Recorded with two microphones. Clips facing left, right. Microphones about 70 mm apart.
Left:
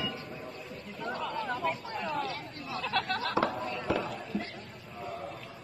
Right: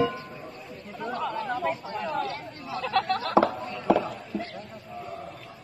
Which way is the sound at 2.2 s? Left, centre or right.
Right.